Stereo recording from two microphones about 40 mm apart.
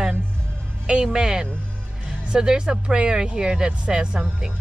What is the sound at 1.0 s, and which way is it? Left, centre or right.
Speech, centre.